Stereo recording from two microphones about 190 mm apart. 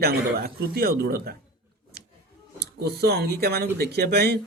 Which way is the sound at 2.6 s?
55° right (ahead or behind).